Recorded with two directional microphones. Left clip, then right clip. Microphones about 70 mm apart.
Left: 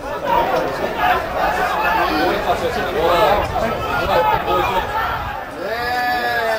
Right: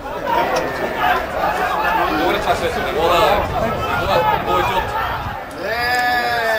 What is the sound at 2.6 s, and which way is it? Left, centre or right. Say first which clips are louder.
Speech: even; right.